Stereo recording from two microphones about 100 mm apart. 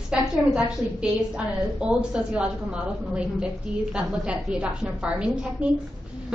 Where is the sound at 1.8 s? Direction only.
10° right (ahead or behind).